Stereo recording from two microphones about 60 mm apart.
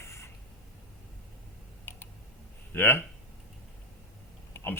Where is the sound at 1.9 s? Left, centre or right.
Left.